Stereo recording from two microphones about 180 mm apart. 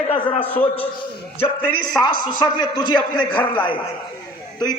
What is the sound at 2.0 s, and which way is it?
A man's voice, 25° left (ahead or behind).